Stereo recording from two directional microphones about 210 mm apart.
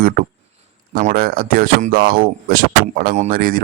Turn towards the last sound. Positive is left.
turn(degrees=-45)  # may be behind; listen again after turning